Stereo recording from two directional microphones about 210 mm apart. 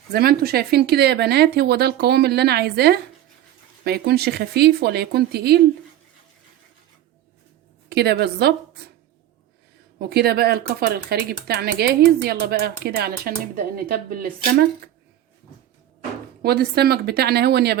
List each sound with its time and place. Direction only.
0.1 s speech: 45° right (ahead or behind)
7.9 s speech: 50° right (ahead or behind)
10.0 s speech: 45° right (ahead or behind)
16.4 s speech: 50° right (ahead or behind)